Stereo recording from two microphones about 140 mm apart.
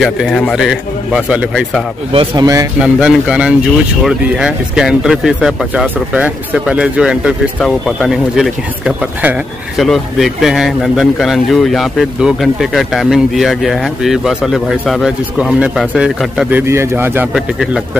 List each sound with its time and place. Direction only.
0.0 s speech: centre (ahead or behind)
2.1 s speech: 25° right (ahead or behind)
2.8 s speech: 5° right (ahead or behind)